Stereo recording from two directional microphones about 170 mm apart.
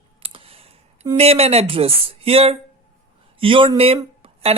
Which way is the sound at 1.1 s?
35° right (ahead or behind).